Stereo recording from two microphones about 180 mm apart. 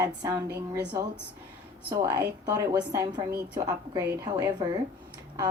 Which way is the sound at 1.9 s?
20° right (ahead or behind).